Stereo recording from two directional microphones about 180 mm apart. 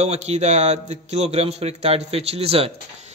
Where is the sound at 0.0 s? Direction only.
40° right (ahead or behind).